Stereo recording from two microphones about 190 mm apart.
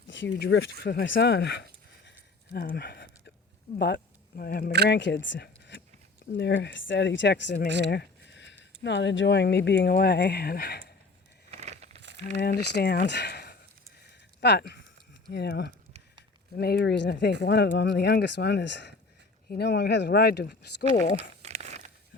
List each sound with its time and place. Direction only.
0.1 s speech: 70° left (ahead or behind)
2.5 s a sound: 50° left (ahead or behind)
3.8 s speech: 60° left (ahead or behind)
4.9 s speech: 70° left (ahead or behind)
11.5 s a sound: 35° right (ahead or behind)
12.4 s speech: 60° left (ahead or behind)
21.2 s crumpling: 35° right (ahead or behind)